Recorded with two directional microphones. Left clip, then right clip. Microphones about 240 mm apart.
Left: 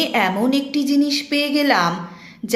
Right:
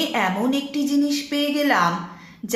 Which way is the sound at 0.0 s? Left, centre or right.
Left.